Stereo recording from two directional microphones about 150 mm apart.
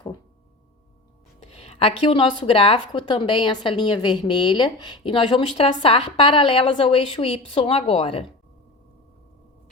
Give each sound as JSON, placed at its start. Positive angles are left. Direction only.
{"t": 1.5, "sound": "speech", "side_deg": 40}